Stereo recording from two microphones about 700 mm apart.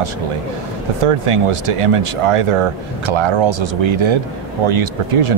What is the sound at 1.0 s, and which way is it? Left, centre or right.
Speech, right.